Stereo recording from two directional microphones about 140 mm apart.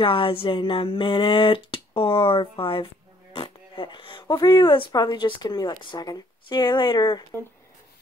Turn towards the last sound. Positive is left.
turn(degrees=30)  # may be behind; listen again after turning